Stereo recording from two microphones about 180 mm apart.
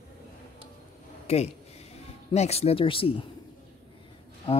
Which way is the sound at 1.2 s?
35° left (ahead or behind).